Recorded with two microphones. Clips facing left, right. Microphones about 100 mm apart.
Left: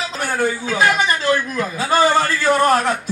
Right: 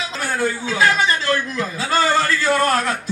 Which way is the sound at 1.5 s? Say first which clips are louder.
Left 2 dB; 50° left (ahead or behind).